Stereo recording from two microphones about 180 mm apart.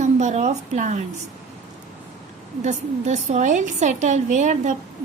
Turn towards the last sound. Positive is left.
turn(degrees=-45)  # may be behind; listen again after turning